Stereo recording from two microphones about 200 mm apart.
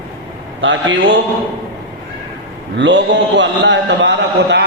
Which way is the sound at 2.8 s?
65° right (ahead or behind).